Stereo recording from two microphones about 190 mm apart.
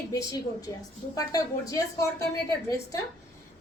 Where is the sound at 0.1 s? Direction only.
20° left (ahead or behind).